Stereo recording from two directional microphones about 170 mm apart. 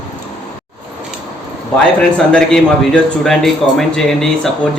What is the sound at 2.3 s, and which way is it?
A man's voice, 5° left (ahead or behind).